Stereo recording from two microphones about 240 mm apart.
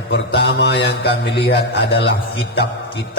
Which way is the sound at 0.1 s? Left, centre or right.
Left.